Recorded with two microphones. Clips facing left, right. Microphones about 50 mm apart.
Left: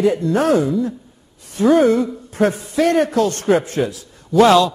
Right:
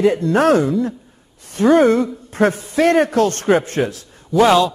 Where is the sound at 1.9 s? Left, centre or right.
Right.